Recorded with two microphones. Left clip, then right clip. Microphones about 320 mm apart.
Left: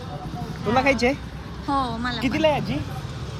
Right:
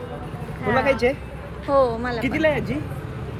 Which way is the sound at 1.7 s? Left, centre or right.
Centre.